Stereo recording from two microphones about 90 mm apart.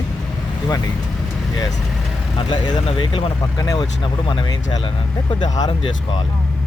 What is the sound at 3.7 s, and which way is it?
Speech, 60° left (ahead or behind).